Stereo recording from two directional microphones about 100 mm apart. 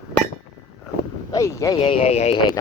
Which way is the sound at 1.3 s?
30° left (ahead or behind).